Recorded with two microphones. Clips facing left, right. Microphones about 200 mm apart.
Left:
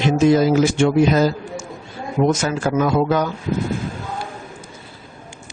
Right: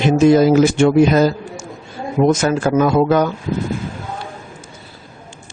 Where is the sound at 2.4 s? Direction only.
55° right (ahead or behind).